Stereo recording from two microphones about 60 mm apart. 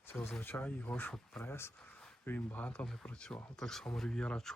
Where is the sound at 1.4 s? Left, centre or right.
Left.